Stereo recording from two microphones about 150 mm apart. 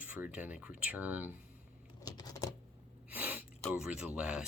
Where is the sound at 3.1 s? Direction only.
10° right (ahead or behind).